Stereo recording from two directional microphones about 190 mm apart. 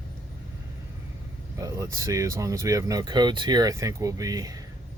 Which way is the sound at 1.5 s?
20° right (ahead or behind).